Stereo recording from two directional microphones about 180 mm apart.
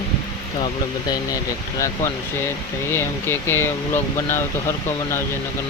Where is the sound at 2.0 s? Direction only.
15° left (ahead or behind).